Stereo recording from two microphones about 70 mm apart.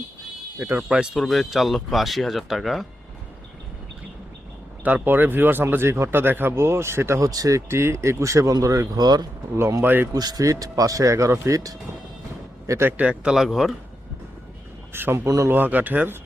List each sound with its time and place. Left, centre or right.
0.8 s speech: centre
1.1 s speech: centre
4.8 s speech: right
7.2 s speech: right
7.7 s speech: right
8.9 s speech: right
9.6 s speech: right
10.2 s speech: right
13.0 s speech: centre
13.3 s speech: centre
14.9 s speech: right